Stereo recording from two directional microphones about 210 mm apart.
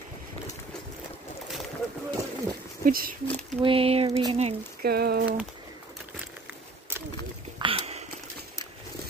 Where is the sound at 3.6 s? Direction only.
25° right (ahead or behind).